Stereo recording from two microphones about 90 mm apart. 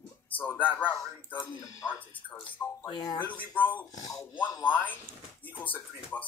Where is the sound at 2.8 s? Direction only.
55° left (ahead or behind).